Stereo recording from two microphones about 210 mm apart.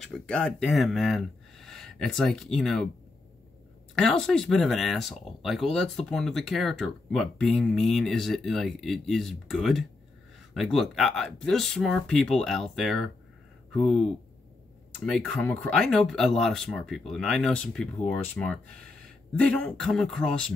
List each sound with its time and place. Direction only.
0.0 s speech: centre (ahead or behind)
3.9 s speech: centre (ahead or behind)